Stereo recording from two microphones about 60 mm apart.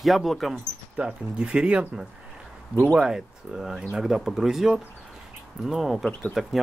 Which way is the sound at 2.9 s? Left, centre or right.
Centre.